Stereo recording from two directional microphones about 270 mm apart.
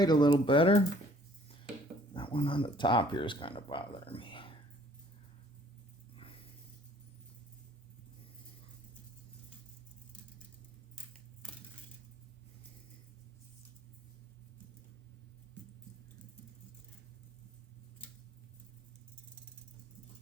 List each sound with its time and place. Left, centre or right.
0.0 s speech: centre
2.1 s speech: centre